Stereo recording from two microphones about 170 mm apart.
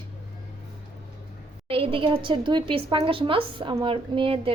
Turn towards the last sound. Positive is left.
turn(degrees=-30)  # may be behind; listen again after turning